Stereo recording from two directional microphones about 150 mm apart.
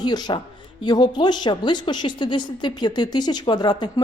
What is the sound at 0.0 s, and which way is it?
A woman's voice, 30° left (ahead or behind).